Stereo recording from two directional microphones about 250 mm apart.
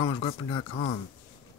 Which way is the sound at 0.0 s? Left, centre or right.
Centre.